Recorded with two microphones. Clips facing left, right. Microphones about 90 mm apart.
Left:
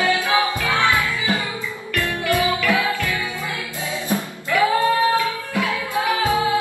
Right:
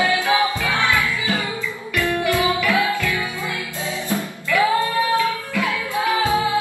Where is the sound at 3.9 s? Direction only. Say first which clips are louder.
Left 1 dB; 20° left (ahead or behind).